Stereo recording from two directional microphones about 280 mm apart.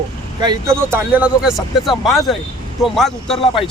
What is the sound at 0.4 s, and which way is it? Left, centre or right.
Speech, centre.